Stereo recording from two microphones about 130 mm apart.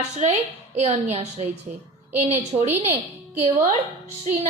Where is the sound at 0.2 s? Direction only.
55° right (ahead or behind).